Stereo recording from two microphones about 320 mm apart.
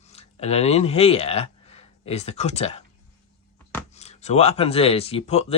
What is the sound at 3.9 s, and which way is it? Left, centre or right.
Speech, centre.